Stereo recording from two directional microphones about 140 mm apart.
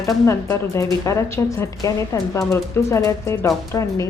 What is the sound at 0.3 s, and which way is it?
A woman's voice, 20° left (ahead or behind).